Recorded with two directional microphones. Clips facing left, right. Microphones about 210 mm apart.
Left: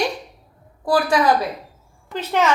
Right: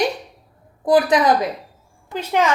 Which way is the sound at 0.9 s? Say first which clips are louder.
Right 2 dB; 20° right (ahead or behind).